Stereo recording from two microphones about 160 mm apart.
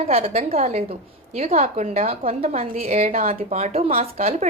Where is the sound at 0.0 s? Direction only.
40° right (ahead or behind).